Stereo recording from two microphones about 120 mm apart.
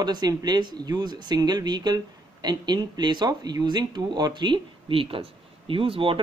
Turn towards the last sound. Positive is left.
turn(degrees=-50)  # may be behind; listen again after turning